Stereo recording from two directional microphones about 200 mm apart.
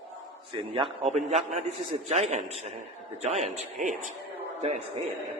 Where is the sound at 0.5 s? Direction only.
25° right (ahead or behind).